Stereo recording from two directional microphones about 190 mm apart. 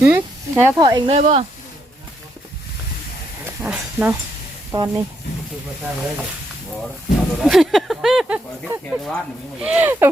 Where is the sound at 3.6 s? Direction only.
5° right (ahead or behind).